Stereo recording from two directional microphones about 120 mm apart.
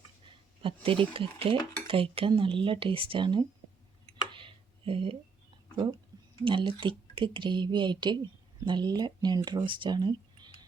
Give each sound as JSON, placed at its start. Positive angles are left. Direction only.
{"t": 0.3, "sound": "speech", "side_deg": -50}
{"t": 4.3, "sound": "a sound", "side_deg": -45}
{"t": 5.7, "sound": "speech", "side_deg": -40}